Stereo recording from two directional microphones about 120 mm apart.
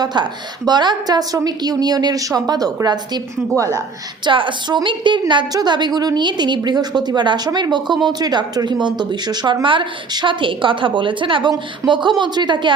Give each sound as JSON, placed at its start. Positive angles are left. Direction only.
{"t": 0.0, "sound": "a woman's voice", "side_deg": -35}
{"t": 4.3, "sound": "a woman's voice", "side_deg": -45}